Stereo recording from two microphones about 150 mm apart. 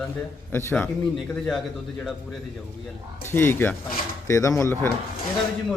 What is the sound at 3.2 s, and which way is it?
A man's voice, 15° left (ahead or behind).